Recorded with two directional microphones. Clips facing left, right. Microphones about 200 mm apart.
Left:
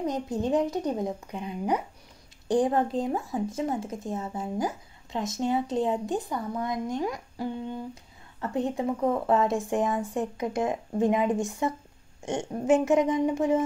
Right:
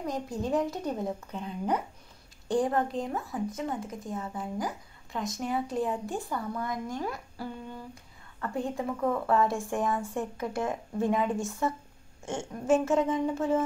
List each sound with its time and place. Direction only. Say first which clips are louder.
0.0 s a woman's voice: left 4 dB; 20° left (ahead or behind)